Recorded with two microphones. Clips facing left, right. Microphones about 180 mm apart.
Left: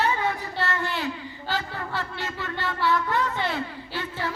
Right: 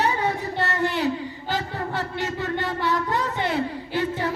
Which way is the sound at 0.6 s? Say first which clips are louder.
Right 5 dB; 20° right (ahead or behind).